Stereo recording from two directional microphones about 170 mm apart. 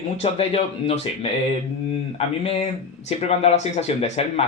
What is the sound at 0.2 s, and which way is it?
Speech, 35° left (ahead or behind).